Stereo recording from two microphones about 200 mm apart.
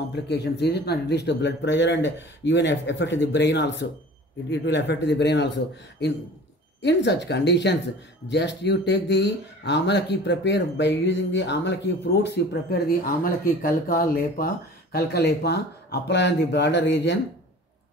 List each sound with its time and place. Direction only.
0.1 s speech: 60° left (ahead or behind)
6.8 s speech: 60° left (ahead or behind)